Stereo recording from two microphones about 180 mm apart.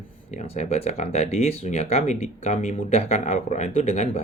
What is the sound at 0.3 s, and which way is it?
Speech, 40° left (ahead or behind).